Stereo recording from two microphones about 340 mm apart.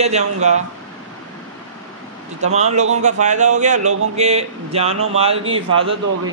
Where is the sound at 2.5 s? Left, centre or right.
Centre.